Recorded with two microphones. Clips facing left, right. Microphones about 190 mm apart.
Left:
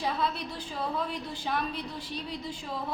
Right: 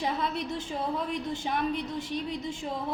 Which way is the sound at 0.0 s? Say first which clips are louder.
Right 1 dB; 20° right (ahead or behind).